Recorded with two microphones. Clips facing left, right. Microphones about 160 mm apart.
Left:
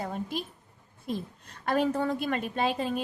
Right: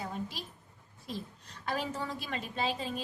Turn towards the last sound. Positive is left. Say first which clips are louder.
# left 6 dB
turn(degrees=60)  # may be behind; listen again after turning